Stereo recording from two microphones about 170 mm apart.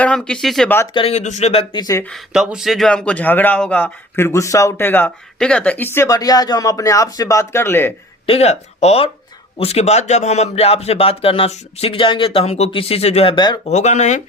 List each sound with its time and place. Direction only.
0.0 s speech: 5° left (ahead or behind)
0.9 s speech: 35° left (ahead or behind)
1.8 s speech: 20° left (ahead or behind)
2.0 s speech: centre (ahead or behind)
8.3 s speech: 40° left (ahead or behind)
13.7 s speech: 40° left (ahead or behind)